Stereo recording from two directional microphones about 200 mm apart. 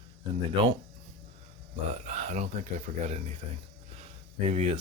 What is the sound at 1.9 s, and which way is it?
Speech, 35° right (ahead or behind).